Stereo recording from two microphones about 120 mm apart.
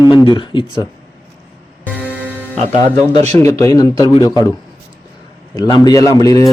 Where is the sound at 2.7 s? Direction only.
70° right (ahead or behind).